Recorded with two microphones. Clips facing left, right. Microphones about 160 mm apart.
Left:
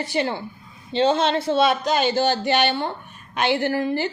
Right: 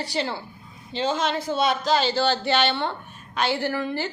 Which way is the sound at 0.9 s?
30° left (ahead or behind).